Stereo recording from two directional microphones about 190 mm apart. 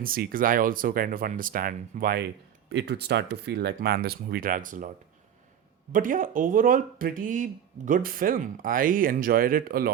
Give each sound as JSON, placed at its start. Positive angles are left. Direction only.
{"t": 0.0, "sound": "speech", "side_deg": -50}
{"t": 2.6, "sound": "speech", "side_deg": -60}
{"t": 5.9, "sound": "speech", "side_deg": -45}